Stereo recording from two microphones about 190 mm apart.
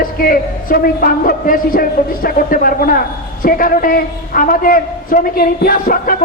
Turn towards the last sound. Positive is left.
turn(degrees=50)  # may be behind; listen again after turning